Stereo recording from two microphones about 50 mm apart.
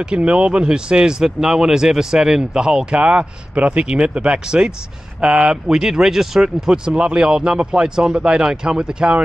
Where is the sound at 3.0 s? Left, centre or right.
Right.